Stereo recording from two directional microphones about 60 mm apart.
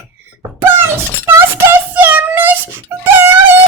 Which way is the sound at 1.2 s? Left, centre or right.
Right.